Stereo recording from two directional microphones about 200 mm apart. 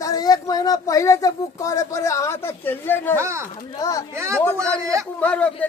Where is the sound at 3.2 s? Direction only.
15° right (ahead or behind).